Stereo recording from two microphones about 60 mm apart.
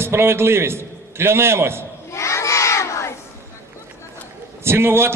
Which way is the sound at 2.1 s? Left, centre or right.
Left.